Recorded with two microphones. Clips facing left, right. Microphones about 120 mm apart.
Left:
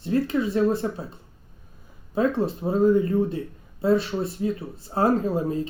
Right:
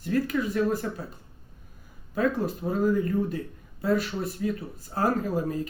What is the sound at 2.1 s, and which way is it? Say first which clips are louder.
Speech: left 3 dB; 25° left (ahead or behind).